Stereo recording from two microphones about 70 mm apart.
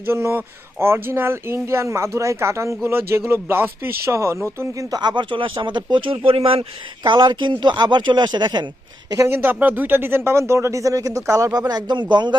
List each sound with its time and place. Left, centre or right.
0.1 s speech: right
4.9 s speech: right
7.0 s speech: right
9.2 s speech: right